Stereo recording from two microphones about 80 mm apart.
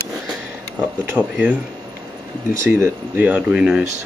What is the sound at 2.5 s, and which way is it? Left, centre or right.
Speech, right.